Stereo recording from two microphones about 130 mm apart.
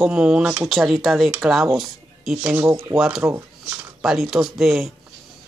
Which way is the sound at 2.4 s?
15° right (ahead or behind).